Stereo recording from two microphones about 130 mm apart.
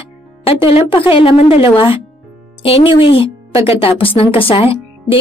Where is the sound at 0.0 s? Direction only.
45° left (ahead or behind).